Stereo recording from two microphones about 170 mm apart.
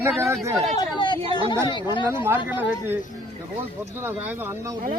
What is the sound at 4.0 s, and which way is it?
Speech, 10° right (ahead or behind).